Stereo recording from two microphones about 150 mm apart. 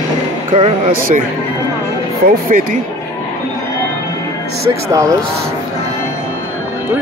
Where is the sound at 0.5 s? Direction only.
40° right (ahead or behind).